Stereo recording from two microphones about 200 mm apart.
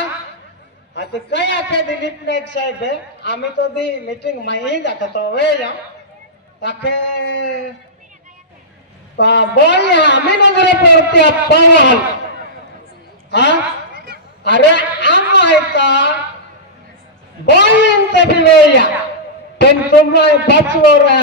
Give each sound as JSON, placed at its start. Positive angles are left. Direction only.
{"t": 0.9, "sound": "a man's voice", "side_deg": 60}
{"t": 9.1, "sound": "a man's voice", "side_deg": 60}
{"t": 13.3, "sound": "a man's voice", "side_deg": 60}
{"t": 13.9, "sound": "a sound", "side_deg": -50}
{"t": 14.4, "sound": "a man's voice", "side_deg": 60}
{"t": 17.6, "sound": "a man's voice", "side_deg": 60}